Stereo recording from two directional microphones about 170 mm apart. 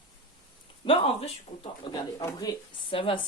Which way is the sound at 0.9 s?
35° left (ahead or behind).